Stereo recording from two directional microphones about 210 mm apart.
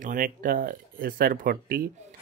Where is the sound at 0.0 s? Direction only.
40° right (ahead or behind).